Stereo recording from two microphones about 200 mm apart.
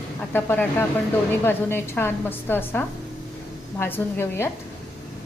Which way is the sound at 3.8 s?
10° left (ahead or behind).